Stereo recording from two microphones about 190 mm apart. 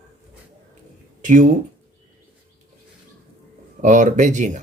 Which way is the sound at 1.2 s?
45° right (ahead or behind).